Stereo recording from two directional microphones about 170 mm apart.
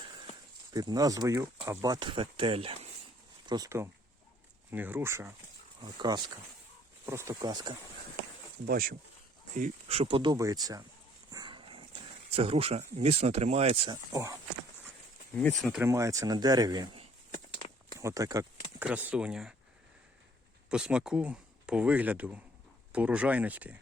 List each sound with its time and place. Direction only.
0.7 s speech: 20° right (ahead or behind)
8.6 s speech: 60° right (ahead or behind)
9.6 s speech: 40° right (ahead or behind)
10.3 s speech: 20° right (ahead or behind)
11.3 s a sound: 25° right (ahead or behind)
12.4 s speech: 35° right (ahead or behind)
13.9 s speech: 20° right (ahead or behind)
15.4 s speech: 5° left (ahead or behind)
15.8 s speech: 15° right (ahead or behind)
18.0 s speech: 20° right (ahead or behind)
18.8 s speech: 10° right (ahead or behind)
20.7 s speech: 5° right (ahead or behind)